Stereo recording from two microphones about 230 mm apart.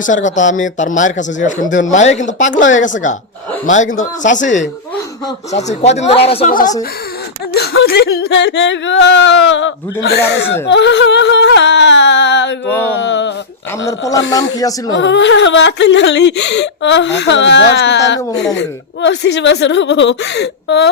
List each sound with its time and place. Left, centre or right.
0.0 s speech: left
6.5 s speech: left
14.3 s speech: centre
14.9 s speech: left